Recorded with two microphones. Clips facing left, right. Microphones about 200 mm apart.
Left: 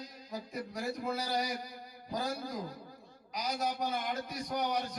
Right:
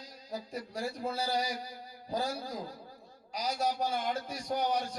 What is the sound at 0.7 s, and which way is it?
Speech, 30° right (ahead or behind).